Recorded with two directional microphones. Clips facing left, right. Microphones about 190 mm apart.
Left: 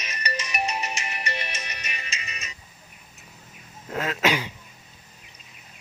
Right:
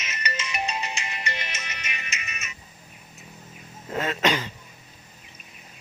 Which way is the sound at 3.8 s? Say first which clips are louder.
Even; centre (ahead or behind).